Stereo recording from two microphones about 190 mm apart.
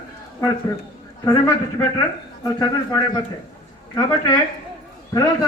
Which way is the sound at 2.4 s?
20° left (ahead or behind).